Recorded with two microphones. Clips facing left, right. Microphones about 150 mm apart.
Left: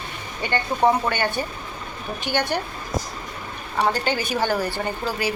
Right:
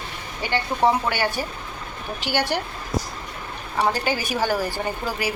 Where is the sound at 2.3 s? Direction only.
10° right (ahead or behind).